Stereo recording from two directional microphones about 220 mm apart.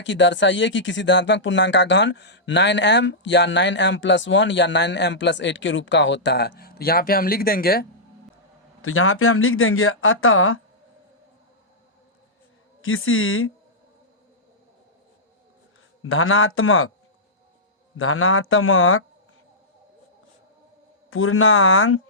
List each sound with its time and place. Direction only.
0.0 s speech: 55° left (ahead or behind)
8.8 s speech: 70° left (ahead or behind)
12.8 s a woman's voice: 65° left (ahead or behind)
16.0 s speech: 65° left (ahead or behind)
17.9 s speech: 65° left (ahead or behind)
21.1 s speech: 65° left (ahead or behind)